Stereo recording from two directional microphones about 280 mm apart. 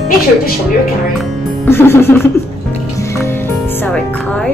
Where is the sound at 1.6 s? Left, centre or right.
Centre.